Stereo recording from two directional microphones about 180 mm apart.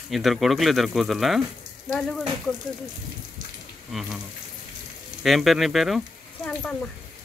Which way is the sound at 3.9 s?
Centre (ahead or behind).